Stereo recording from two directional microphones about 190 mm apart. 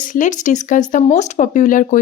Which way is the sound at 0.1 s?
40° left (ahead or behind).